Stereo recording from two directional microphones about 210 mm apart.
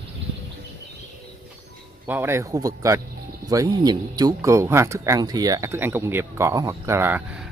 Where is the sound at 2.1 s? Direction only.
10° right (ahead or behind).